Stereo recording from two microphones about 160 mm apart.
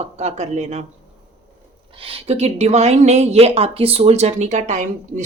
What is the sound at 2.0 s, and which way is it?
Speech, 40° right (ahead or behind).